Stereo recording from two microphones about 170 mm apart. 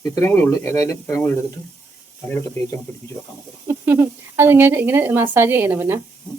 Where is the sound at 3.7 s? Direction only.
15° right (ahead or behind).